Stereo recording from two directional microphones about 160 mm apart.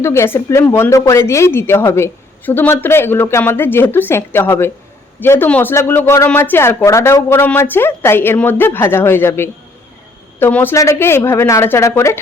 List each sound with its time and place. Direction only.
0.0 s speech: 15° left (ahead or behind)